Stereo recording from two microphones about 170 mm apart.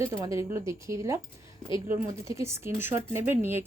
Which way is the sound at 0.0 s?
20° right (ahead or behind).